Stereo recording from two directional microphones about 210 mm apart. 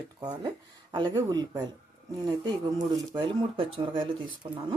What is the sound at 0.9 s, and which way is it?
A woman's voice, 20° right (ahead or behind).